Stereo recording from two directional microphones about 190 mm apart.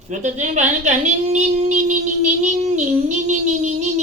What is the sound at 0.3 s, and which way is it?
Speech, 40° right (ahead or behind).